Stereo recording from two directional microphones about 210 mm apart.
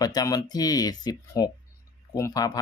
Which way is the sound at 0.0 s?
15° left (ahead or behind).